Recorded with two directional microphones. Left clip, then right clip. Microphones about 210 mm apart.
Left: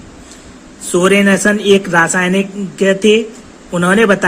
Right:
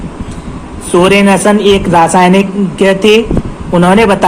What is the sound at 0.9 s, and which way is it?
A woman's voice, 20° left (ahead or behind).